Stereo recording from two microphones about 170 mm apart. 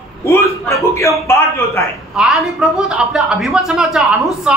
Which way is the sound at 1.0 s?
15° left (ahead or behind).